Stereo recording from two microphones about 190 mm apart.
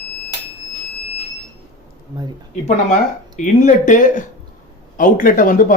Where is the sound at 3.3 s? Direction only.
40° left (ahead or behind).